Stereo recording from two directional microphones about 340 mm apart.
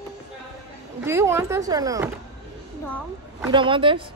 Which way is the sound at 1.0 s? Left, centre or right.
Centre.